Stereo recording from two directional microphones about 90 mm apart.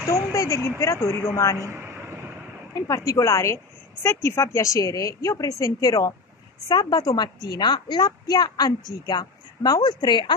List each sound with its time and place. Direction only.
0.0 s a woman's voice: 35° left (ahead or behind)
1.6 s a sound: 30° right (ahead or behind)
3.1 s a woman's voice: 35° left (ahead or behind)
6.7 s a woman's voice: 50° left (ahead or behind)